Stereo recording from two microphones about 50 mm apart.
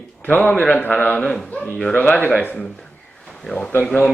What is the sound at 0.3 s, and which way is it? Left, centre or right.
Speech, left.